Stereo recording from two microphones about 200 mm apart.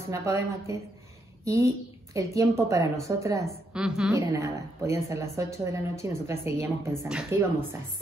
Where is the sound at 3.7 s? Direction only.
5° right (ahead or behind).